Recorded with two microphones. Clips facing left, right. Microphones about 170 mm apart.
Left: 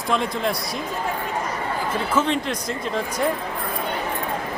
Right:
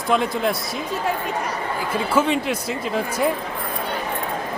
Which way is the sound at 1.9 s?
10° right (ahead or behind).